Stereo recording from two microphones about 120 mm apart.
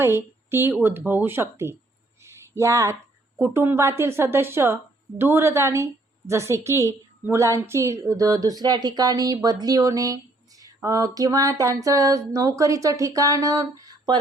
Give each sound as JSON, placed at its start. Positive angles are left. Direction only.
{"t": 0.0, "sound": "a woman's voice", "side_deg": -20}
{"t": 2.2, "sound": "a sound", "side_deg": -25}
{"t": 3.4, "sound": "a woman's voice", "side_deg": -20}